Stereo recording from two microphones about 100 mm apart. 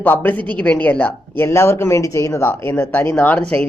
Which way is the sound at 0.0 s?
20° left (ahead or behind).